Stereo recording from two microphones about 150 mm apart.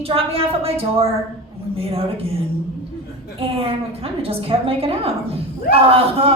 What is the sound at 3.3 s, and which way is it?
A woman's voice, 40° right (ahead or behind).